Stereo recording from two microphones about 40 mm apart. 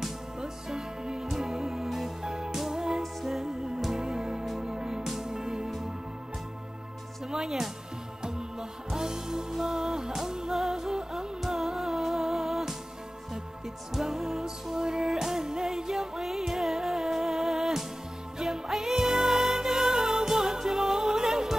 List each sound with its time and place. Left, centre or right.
0.7 s music: centre
1.2 s music: centre
1.5 s music: centre
3.0 s music: centre
4.0 s music: centre
7.2 s music: centre
13.9 s music: centre